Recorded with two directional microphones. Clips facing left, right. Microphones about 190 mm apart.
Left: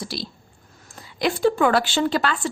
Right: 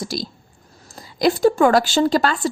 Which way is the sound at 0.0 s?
45° right (ahead or behind).